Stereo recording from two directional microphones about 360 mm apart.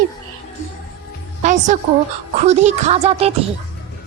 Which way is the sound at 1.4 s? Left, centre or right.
Centre.